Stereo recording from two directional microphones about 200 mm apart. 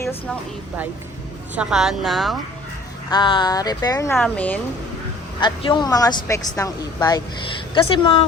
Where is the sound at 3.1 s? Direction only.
20° left (ahead or behind).